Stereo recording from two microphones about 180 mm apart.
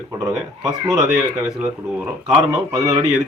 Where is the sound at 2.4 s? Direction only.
20° right (ahead or behind).